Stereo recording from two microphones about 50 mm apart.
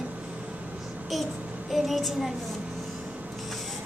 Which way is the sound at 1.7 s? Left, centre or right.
Centre.